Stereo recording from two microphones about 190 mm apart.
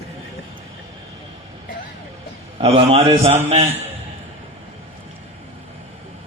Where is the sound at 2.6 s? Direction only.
30° right (ahead or behind).